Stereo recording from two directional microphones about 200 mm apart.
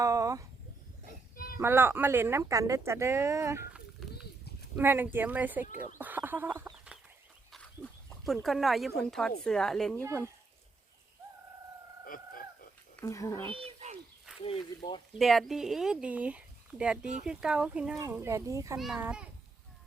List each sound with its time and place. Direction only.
0.0 s a sound: 15° right (ahead or behind)
1.5 s speech: 10° right (ahead or behind)
6.7 s chicken: 5° right (ahead or behind)
8.2 s speech: centre (ahead or behind)
12.0 s chicken: 45° left (ahead or behind)
13.0 s speech: 15° left (ahead or behind)
13.7 s a sound: 35° right (ahead or behind)
14.3 s a sound: 5° right (ahead or behind)
15.2 s speech: centre (ahead or behind)